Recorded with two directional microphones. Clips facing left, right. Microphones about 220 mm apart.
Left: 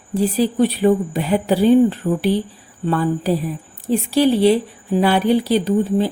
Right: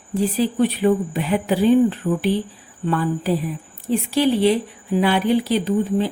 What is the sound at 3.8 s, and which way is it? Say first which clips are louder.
A woman's voice: left 3 dB; 40° left (ahead or behind).